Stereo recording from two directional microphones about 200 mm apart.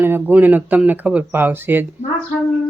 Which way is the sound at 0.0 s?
10° right (ahead or behind).